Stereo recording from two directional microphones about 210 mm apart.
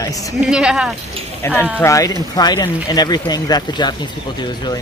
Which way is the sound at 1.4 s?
10° left (ahead or behind).